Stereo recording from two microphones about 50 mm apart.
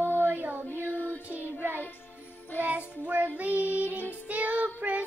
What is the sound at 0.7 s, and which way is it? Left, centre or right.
Child singing, left.